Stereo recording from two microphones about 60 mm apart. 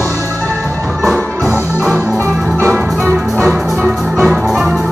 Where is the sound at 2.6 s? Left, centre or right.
Right.